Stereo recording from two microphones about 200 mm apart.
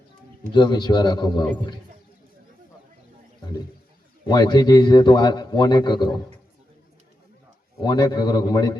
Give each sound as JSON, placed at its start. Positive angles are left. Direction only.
{"t": 0.5, "sound": "a man's voice", "side_deg": 20}
{"t": 4.3, "sound": "a man's voice", "side_deg": 20}
{"t": 7.8, "sound": "a man's voice", "side_deg": 20}